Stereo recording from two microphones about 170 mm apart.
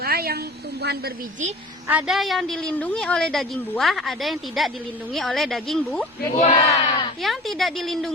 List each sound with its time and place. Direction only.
0.0 s a sound: 65° right (ahead or behind)
0.8 s speech: 70° right (ahead or behind)
1.9 s a woman's voice: 5° right (ahead or behind)
6.4 s speech: 40° left (ahead or behind)
7.2 s a woman's voice: centre (ahead or behind)